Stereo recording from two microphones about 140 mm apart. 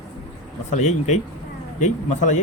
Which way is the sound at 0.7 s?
55° left (ahead or behind).